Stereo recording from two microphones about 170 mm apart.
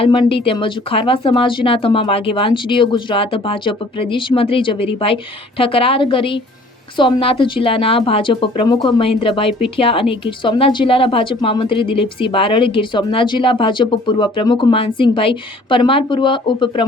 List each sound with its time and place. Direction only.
0.0 s a woman's voice: 30° left (ahead or behind)